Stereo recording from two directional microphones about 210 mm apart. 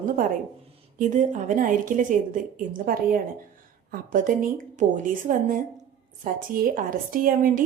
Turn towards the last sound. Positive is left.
turn(degrees=-40)  # may be behind; listen again after turning